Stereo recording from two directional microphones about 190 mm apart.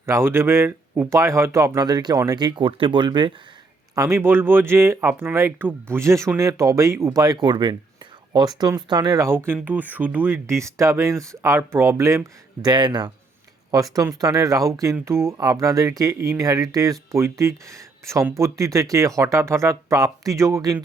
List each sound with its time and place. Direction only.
0.0 s speech: 15° right (ahead or behind)